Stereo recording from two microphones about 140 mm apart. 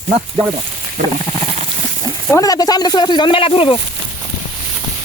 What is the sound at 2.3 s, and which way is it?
Speech, 25° left (ahead or behind).